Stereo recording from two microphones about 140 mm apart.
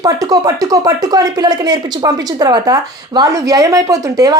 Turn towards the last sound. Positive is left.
turn(degrees=-25)  # may be behind; listen again after turning